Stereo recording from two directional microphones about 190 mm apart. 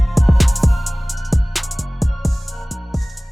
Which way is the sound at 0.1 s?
Centre (ahead or behind).